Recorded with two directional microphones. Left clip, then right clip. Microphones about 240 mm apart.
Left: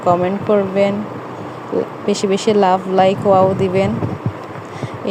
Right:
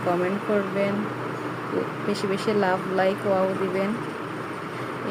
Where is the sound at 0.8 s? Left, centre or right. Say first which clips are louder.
Left 11 dB; left.